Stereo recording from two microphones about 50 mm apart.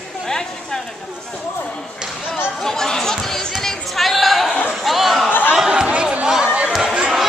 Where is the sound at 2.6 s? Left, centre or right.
Centre.